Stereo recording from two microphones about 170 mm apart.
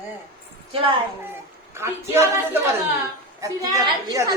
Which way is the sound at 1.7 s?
15° right (ahead or behind).